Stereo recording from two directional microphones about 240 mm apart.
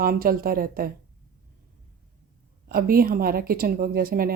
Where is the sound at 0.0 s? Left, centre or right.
Right.